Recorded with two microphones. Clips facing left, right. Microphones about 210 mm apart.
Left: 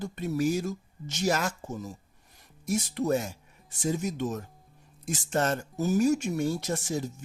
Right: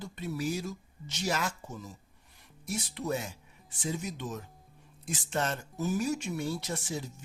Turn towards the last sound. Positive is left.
turn(degrees=45)  # may be behind; listen again after turning